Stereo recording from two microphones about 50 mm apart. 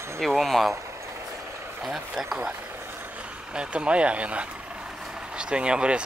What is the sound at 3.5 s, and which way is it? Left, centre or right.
Speech, right.